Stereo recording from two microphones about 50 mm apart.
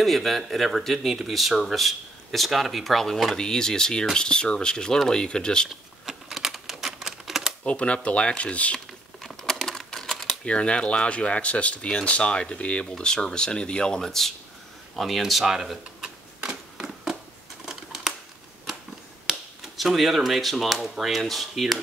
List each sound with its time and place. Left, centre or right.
0.0 s speech: centre
6.0 s typewriter: centre
7.6 s speech: left
8.7 s typing: centre
10.4 s speech: left
15.0 s camera: centre
17.6 s a sound: centre
19.2 s speech: centre